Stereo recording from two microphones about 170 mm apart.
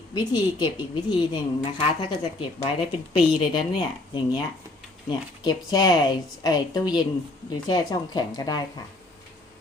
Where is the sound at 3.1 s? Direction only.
30° left (ahead or behind).